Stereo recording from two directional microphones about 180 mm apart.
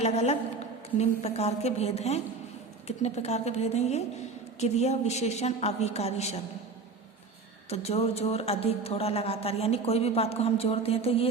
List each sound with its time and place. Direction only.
0.0 s a woman's voice: 35° left (ahead or behind)
7.7 s a woman's voice: 35° left (ahead or behind)